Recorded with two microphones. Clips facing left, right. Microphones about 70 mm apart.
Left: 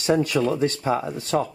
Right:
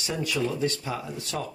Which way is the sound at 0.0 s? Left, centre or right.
Left.